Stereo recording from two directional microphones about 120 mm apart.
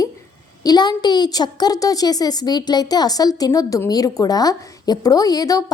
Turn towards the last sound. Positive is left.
turn(degrees=30)  # may be behind; listen again after turning